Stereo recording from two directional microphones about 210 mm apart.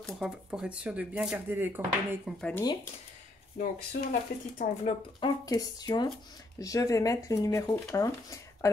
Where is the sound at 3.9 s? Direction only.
45° left (ahead or behind).